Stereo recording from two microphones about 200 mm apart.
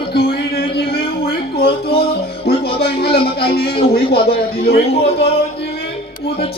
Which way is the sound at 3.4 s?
50° left (ahead or behind).